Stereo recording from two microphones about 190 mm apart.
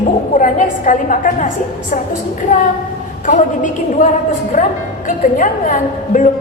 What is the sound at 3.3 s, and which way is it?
A woman's voice, 40° left (ahead or behind).